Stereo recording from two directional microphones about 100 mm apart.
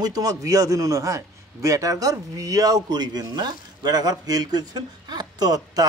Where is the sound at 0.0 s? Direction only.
40° right (ahead or behind).